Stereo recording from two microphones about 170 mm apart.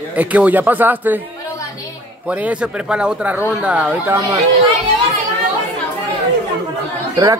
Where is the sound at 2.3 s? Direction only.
10° right (ahead or behind).